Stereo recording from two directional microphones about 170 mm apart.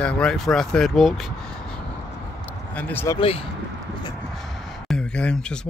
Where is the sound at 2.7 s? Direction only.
10° left (ahead or behind).